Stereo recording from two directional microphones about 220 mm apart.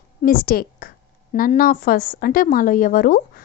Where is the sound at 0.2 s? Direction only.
40° left (ahead or behind).